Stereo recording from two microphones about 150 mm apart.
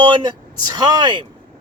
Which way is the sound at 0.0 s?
30° right (ahead or behind).